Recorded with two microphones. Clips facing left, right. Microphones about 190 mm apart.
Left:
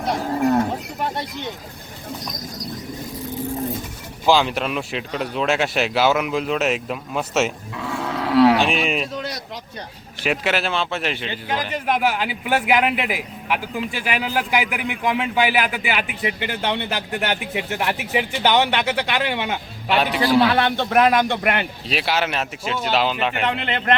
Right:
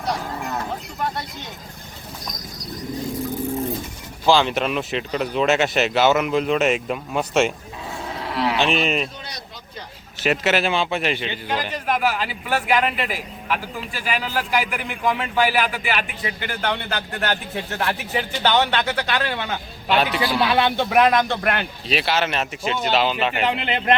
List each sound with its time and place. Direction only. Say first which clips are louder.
0.3 s livestock: left 10 dB; 35° left (ahead or behind)
4.3 s speech: even; 5° left (ahead or behind)
7.8 s roaring cats: left 8 dB; 70° left (ahead or behind)
8.6 s speech: even; 5° left (ahead or behind)
10.4 s speech: right 3 dB; 5° right (ahead or behind)
11.9 s a man's voice: left 1 dB; 20° left (ahead or behind)
20.2 s a man's voice: left 3 dB; 15° right (ahead or behind)
20.9 s speech: left 1 dB; 5° left (ahead or behind)
23.3 s a man's voice: right 1 dB; 5° right (ahead or behind)